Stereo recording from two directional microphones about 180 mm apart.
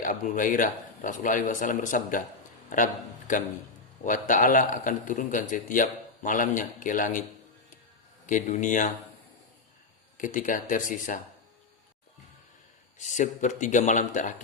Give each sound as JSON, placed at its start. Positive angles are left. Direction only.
{"t": 0.0, "sound": "a man's voice", "side_deg": 45}
{"t": 8.3, "sound": "a man's voice", "side_deg": 40}
{"t": 10.2, "sound": "a man's voice", "side_deg": 45}
{"t": 13.0, "sound": "a man's voice", "side_deg": 45}